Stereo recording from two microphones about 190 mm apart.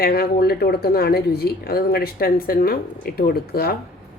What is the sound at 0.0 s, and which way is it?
Speech, 55° left (ahead or behind).